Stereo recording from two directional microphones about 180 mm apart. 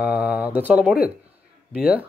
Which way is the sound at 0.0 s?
5° right (ahead or behind).